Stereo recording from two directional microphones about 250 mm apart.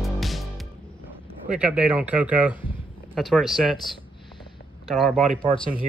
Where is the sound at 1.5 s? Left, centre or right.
Centre.